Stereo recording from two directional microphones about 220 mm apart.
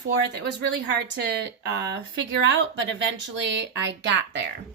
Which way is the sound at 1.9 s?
55° right (ahead or behind).